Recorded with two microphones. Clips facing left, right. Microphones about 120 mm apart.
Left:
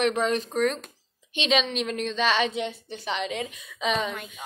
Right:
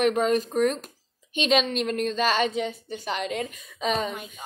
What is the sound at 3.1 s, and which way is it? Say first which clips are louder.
Speech: right 1 dB; 45° right (ahead or behind).